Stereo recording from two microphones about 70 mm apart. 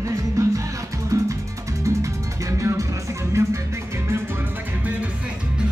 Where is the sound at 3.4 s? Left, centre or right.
Right.